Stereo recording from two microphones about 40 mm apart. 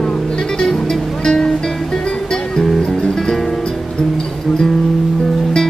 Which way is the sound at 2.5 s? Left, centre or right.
Centre.